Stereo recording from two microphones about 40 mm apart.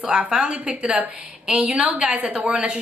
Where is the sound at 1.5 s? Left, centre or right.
Right.